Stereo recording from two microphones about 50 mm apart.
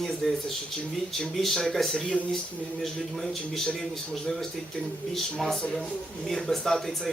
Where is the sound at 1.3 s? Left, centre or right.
Centre.